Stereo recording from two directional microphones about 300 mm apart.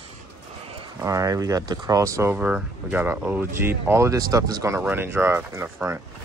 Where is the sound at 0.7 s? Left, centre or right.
Centre.